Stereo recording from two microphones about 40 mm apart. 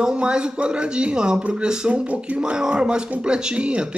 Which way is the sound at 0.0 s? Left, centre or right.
Right.